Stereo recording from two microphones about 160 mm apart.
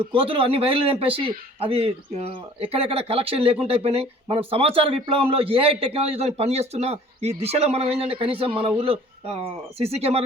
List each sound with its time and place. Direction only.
0.0 s a man's voice: 35° right (ahead or behind)